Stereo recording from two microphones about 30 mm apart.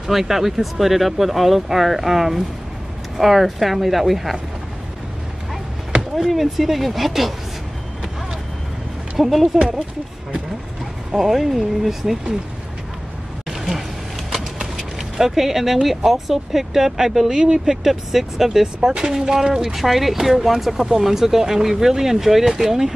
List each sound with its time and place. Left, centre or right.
0.0 s speech: centre
6.1 s speech: centre
9.2 s speech: centre
11.1 s speech: centre
14.8 s speech: centre
17.3 s speech: right
17.8 s speech: centre
19.7 s speech: centre